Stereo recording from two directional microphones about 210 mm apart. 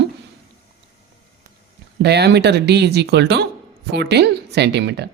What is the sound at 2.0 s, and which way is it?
Speech, 55° right (ahead or behind).